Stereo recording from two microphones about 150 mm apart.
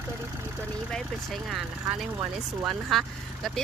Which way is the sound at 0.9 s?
Centre (ahead or behind).